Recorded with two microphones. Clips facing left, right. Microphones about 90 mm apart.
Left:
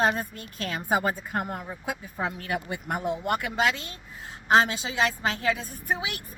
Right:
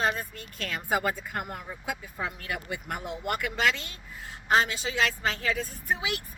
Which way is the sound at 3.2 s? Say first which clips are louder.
Right 1 dB; 25° left (ahead or behind).